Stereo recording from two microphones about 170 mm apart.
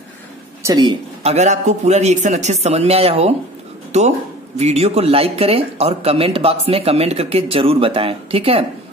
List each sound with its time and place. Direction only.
0.6 s speech: 20° right (ahead or behind)
1.3 s speech: 45° right (ahead or behind)